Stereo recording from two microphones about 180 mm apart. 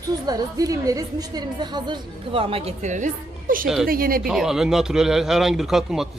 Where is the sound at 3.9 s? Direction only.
55° right (ahead or behind).